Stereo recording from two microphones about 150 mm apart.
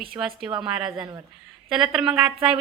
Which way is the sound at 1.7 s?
5° right (ahead or behind).